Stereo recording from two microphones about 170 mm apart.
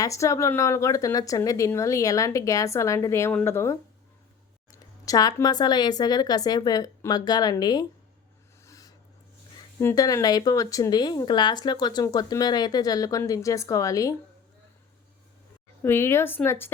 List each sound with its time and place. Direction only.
0.0 s speech: 20° left (ahead or behind)
5.0 s speech: 20° left (ahead or behind)
8.6 s a sound: 20° left (ahead or behind)
9.8 s speech: 20° left (ahead or behind)
15.8 s speech: 15° left (ahead or behind)